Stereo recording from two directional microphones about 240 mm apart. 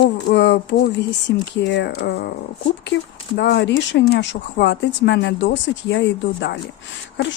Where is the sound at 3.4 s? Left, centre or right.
Left.